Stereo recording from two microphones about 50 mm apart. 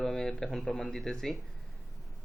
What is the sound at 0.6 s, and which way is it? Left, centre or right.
Speech, left.